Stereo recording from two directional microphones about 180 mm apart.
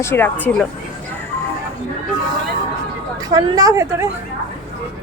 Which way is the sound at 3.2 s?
20° right (ahead or behind).